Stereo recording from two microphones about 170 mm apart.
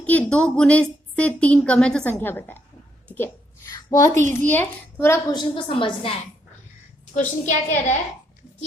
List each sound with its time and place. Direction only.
0.0 s a woman's voice: 10° left (ahead or behind)
3.7 s a woman's voice: 20° left (ahead or behind)
5.3 s a woman's voice: 25° left (ahead or behind)
7.1 s a woman's voice: 50° left (ahead or behind)